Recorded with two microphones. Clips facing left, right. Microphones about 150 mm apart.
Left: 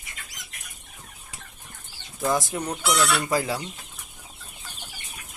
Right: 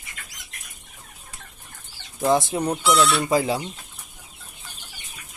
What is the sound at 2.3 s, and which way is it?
Speech, 25° right (ahead or behind).